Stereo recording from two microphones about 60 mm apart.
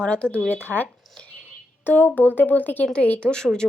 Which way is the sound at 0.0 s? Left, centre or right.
Centre.